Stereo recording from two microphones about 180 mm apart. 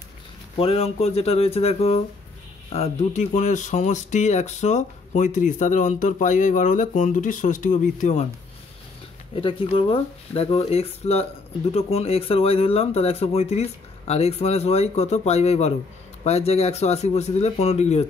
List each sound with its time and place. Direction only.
0.6 s speech: 35° left (ahead or behind)
9.3 s speech: 30° left (ahead or behind)